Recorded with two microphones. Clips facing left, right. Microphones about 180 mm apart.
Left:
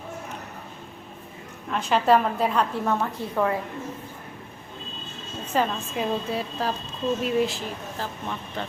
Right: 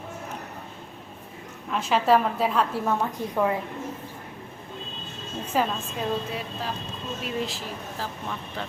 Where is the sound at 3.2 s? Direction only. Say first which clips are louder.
Right 1 dB; 15° right (ahead or behind).